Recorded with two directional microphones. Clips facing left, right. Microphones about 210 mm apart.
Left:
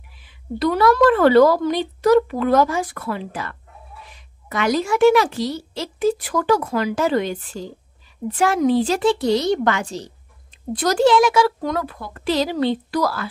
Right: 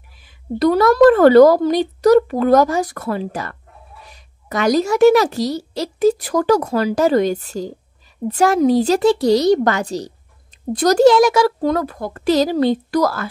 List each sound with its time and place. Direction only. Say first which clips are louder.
0.2 s a woman's voice: right 5 dB; 45° right (ahead or behind)